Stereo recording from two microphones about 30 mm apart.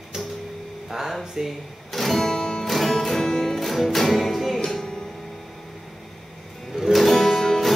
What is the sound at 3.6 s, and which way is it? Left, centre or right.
Music, centre.